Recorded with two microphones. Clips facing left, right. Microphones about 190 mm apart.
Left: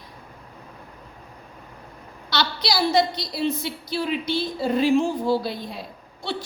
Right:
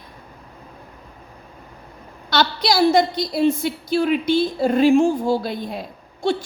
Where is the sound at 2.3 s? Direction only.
50° right (ahead or behind).